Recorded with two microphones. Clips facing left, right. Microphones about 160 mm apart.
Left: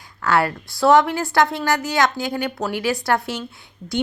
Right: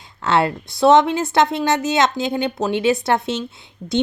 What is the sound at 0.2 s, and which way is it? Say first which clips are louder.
Speech: right 1 dB; 25° right (ahead or behind).